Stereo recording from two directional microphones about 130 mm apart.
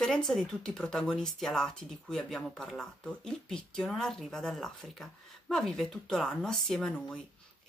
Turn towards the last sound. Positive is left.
turn(degrees=5)  # may be behind; listen again after turning